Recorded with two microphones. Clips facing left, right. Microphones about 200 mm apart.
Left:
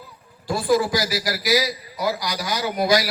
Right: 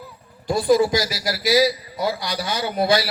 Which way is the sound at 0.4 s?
20° right (ahead or behind).